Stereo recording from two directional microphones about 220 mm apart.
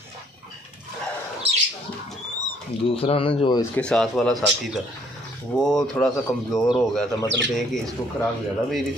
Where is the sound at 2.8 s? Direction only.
25° left (ahead or behind).